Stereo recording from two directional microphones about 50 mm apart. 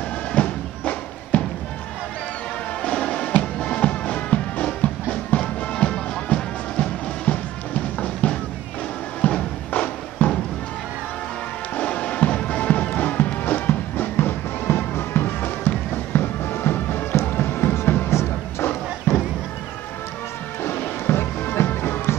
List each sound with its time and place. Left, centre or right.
0.3 s music: left
2.8 s music: left
11.7 s music: left
18.1 s a sound: left
20.6 s music: left